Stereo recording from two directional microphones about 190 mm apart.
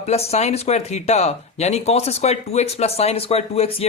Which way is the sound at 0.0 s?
35° left (ahead or behind).